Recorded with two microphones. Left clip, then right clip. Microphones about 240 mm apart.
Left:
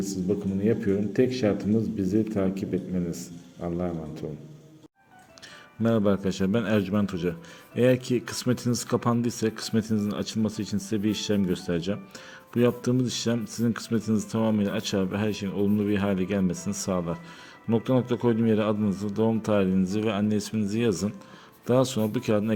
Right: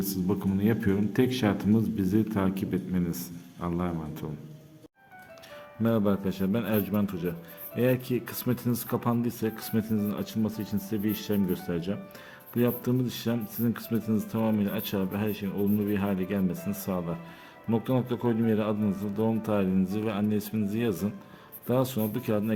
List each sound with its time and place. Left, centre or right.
0.6 s a man's voice: centre
5.8 s speech: centre